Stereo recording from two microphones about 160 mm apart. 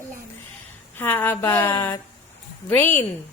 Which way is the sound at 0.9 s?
10° left (ahead or behind).